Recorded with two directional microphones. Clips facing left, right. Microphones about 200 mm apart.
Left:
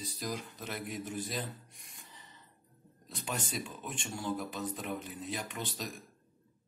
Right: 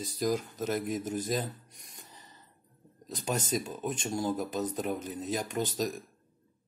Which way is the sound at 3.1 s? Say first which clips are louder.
Right 7 dB; 40° right (ahead or behind).